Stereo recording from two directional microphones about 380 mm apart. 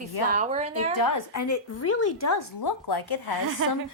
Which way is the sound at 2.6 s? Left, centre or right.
Left.